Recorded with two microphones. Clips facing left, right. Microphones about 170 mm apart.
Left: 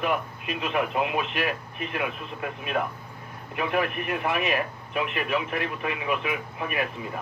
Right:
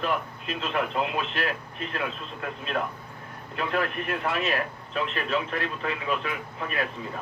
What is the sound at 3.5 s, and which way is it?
A man's voice, 15° left (ahead or behind).